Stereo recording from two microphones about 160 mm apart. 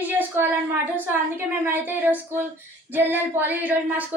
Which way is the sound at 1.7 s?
10° right (ahead or behind).